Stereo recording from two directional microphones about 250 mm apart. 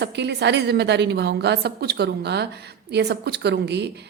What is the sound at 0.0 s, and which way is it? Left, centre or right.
A woman's voice, right.